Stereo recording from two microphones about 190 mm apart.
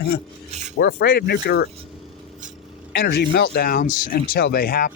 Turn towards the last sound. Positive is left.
turn(degrees=50)  # may be behind; listen again after turning